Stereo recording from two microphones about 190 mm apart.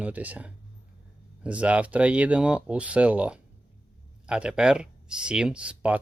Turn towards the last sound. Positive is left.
turn(degrees=-5)  # may be behind; listen again after turning